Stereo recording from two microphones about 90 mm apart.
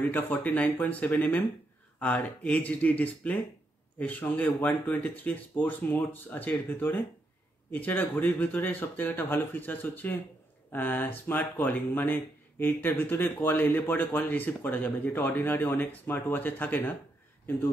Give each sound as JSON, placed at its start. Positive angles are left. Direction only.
{"t": 0.1, "sound": "speech", "side_deg": 20}